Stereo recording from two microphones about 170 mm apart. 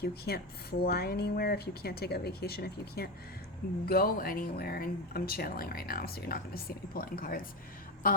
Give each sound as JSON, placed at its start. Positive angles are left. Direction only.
{"t": 0.0, "sound": "speech", "side_deg": 65}